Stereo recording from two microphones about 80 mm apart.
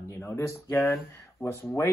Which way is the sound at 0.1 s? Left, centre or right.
Left.